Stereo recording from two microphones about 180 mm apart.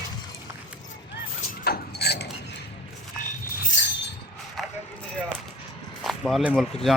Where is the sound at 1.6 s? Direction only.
65° left (ahead or behind).